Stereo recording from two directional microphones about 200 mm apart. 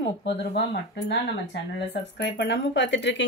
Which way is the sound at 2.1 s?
60° left (ahead or behind).